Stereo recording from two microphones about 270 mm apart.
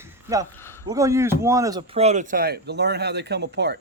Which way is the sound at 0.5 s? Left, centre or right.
Centre.